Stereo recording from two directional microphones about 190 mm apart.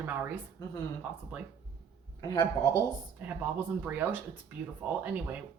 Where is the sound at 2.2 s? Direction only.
20° left (ahead or behind).